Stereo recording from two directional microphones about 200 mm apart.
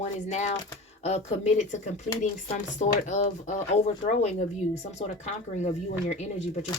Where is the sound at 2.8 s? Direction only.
35° left (ahead or behind).